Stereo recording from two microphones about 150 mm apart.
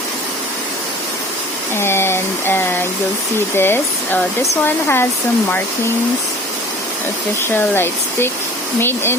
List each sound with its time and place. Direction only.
1.7 s speech: 15° left (ahead or behind)
7.5 s speech: 15° left (ahead or behind)